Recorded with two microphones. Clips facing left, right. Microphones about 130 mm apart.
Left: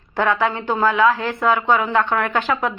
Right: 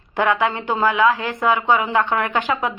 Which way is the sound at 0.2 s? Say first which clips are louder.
Even; 15° right (ahead or behind).